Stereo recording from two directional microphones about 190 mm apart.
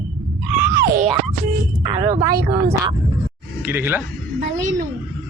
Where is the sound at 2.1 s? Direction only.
20° right (ahead or behind).